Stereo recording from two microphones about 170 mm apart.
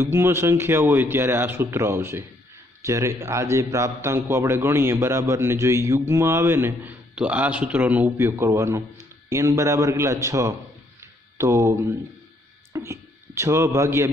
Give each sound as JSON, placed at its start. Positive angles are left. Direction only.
{"t": 0.0, "sound": "a man's voice", "side_deg": -15}
{"t": 11.0, "sound": "a sound", "side_deg": -15}
{"t": 12.7, "sound": "a man's voice", "side_deg": -15}